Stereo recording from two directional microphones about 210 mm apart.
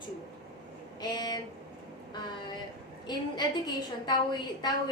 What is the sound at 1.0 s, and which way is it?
Speech, 20° left (ahead or behind).